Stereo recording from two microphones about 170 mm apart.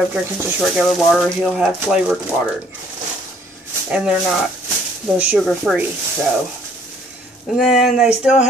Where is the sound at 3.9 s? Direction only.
5° right (ahead or behind).